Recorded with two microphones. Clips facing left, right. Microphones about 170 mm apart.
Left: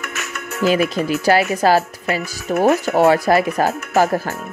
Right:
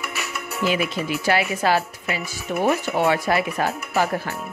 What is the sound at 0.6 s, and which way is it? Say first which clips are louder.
Speech: left 6 dB; 40° left (ahead or behind).